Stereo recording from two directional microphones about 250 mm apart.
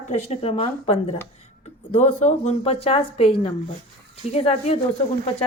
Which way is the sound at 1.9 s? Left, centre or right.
Left.